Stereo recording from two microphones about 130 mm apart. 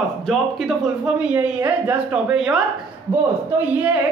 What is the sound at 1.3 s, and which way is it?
A woman's voice, 10° right (ahead or behind).